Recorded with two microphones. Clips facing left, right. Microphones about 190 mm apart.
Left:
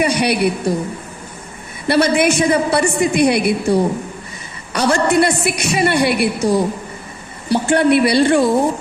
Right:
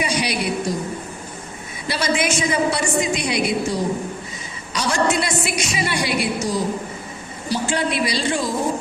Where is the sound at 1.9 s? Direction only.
60° left (ahead or behind).